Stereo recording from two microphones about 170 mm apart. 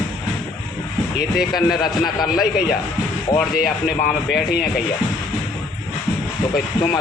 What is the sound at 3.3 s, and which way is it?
Speech, centre (ahead or behind).